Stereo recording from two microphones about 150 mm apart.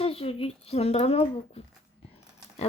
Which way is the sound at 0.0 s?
40° left (ahead or behind).